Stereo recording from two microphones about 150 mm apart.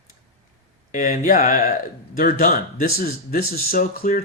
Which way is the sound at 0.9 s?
60° left (ahead or behind).